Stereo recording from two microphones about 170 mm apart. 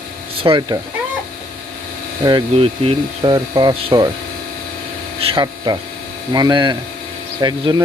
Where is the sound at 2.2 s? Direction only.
30° right (ahead or behind).